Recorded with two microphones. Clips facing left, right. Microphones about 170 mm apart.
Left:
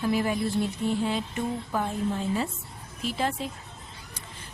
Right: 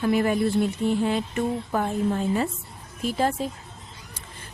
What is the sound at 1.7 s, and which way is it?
Speech, 55° right (ahead or behind).